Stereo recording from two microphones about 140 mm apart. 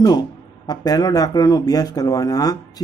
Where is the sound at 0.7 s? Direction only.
30° left (ahead or behind).